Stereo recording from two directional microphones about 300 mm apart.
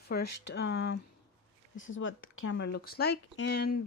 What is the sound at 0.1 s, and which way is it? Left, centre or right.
Speech, left.